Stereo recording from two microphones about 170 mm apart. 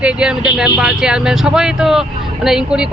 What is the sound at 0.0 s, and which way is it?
Speech, 5° right (ahead or behind).